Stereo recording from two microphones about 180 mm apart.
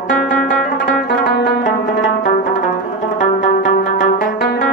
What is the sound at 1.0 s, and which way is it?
Pizzicato, 55° left (ahead or behind).